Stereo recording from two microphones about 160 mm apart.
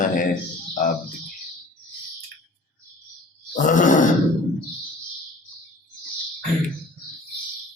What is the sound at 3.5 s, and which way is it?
Speech, 55° left (ahead or behind).